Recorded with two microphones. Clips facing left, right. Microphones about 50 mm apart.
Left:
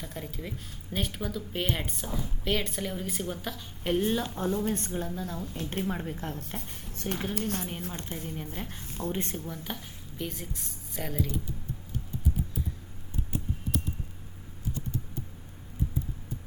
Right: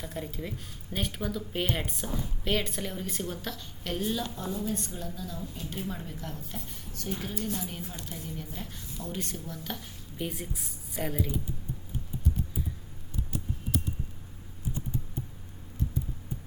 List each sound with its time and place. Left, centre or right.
0.0 s a woman's voice: centre
4.0 s speech: left
5.9 s speech: left
7.1 s a woman's voice: left
9.6 s speech: centre
10.2 s a woman's voice: centre